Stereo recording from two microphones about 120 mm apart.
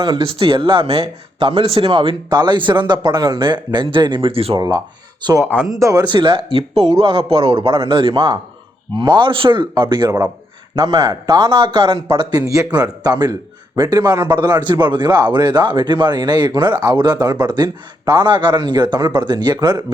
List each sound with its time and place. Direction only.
0.0 s speech: 45° right (ahead or behind)
4.5 s speech: 35° right (ahead or behind); by 7.5 s 50° right (ahead or behind)
7.5 s speech: 30° right (ahead or behind)
7.8 s speech: 45° right (ahead or behind)